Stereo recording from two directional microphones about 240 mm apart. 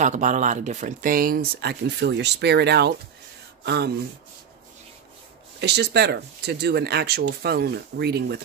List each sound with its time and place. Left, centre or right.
0.0 s speech: right
5.6 s speech: right